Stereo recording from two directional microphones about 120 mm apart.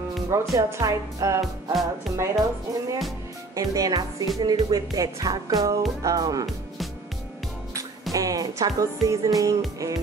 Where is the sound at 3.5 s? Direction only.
30° right (ahead or behind).